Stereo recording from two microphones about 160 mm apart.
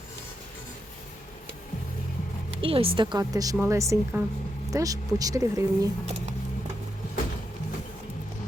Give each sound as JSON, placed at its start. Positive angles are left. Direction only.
{"t": 2.6, "sound": "a woman's voice", "side_deg": -35}